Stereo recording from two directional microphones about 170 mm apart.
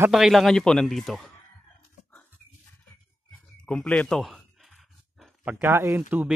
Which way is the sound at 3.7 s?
5° left (ahead or behind).